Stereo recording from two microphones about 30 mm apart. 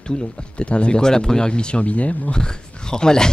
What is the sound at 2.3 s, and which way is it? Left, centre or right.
Speech, left.